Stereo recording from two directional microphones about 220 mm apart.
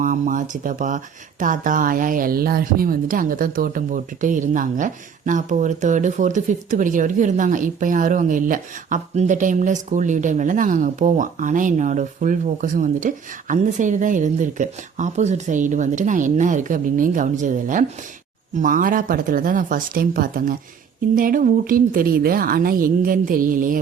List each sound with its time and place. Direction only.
0.0 s speech: 35° right (ahead or behind)